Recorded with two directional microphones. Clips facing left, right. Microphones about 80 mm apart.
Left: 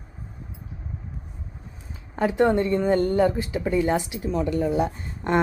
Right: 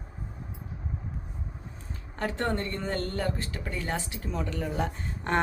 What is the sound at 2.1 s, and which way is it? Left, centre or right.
Speech, centre.